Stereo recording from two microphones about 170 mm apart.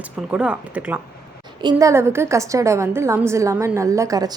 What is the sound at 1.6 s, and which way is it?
A woman's voice, 20° right (ahead or behind).